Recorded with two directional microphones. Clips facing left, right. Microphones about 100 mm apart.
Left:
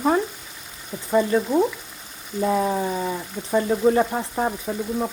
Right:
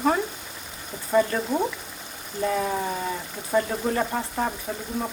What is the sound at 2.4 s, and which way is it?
Speech, 20° left (ahead or behind).